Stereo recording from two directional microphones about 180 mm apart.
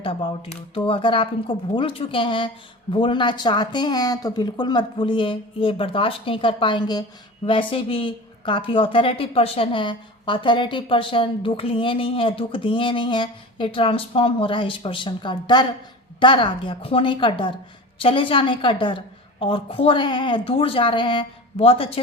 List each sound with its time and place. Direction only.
0.0 s a woman's voice: 30° left (ahead or behind)